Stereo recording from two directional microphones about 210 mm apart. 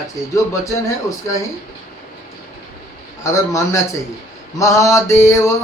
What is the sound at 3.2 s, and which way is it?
Male singing, 15° left (ahead or behind).